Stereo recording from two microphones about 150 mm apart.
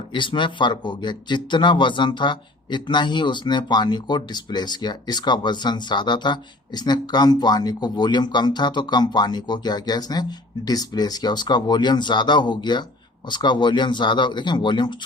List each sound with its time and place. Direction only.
0.1 s speech: 35° left (ahead or behind)